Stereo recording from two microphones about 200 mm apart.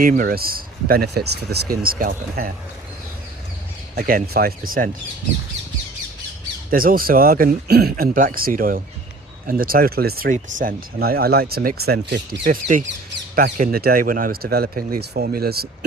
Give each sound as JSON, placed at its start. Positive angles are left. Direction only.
{"t": 0.0, "sound": "speech", "side_deg": -45}
{"t": 3.9, "sound": "speech", "side_deg": -45}
{"t": 6.7, "sound": "speech", "side_deg": -45}